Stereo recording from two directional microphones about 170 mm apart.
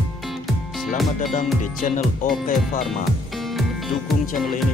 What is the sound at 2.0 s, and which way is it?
Music, centre (ahead or behind).